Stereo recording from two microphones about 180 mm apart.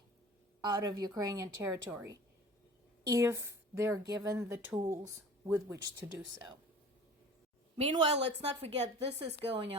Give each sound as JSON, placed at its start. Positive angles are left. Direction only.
{"t": 0.6, "sound": "speech", "side_deg": -25}
{"t": 7.8, "sound": "a woman's voice", "side_deg": -35}